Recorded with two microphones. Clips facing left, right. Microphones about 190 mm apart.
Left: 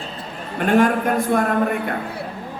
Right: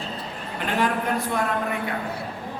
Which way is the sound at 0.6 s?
50° left (ahead or behind).